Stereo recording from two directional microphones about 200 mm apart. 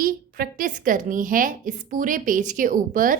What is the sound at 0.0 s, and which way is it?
A woman's voice, 45° right (ahead or behind).